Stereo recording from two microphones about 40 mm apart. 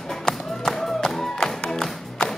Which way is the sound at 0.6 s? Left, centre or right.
Centre.